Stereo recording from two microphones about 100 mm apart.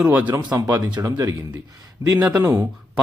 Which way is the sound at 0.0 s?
15° right (ahead or behind).